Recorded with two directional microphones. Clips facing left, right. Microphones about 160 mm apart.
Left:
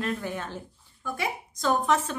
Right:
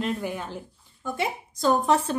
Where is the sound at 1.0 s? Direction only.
30° right (ahead or behind).